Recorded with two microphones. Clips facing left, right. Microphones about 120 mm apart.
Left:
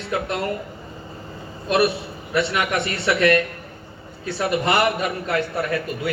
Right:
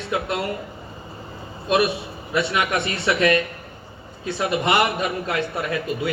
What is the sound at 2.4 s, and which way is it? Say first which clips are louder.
A man's voice: even; 20° right (ahead or behind).